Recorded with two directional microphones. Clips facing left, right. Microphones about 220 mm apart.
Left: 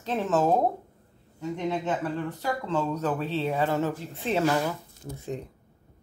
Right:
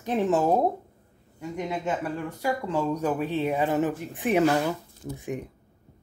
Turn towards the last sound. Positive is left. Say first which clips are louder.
# right 2 dB
turn(degrees=-15)  # may be behind; listen again after turning